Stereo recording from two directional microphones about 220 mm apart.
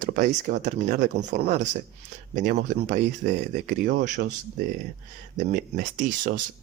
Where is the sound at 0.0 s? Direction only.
35° right (ahead or behind).